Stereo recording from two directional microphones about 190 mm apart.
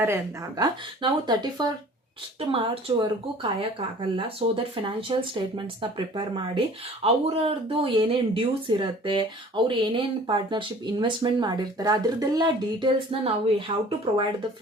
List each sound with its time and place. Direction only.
0.0 s speech: 15° right (ahead or behind)